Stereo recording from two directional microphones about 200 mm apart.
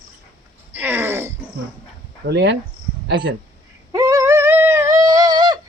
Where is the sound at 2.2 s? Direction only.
60° right (ahead or behind).